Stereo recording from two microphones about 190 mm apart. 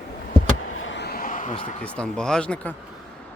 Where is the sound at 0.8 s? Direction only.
75° left (ahead or behind); by 1.7 s 40° left (ahead or behind).